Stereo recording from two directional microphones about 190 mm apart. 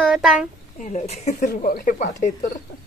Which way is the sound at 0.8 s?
35° left (ahead or behind).